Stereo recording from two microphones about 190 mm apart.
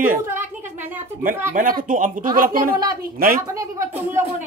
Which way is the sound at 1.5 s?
45° right (ahead or behind).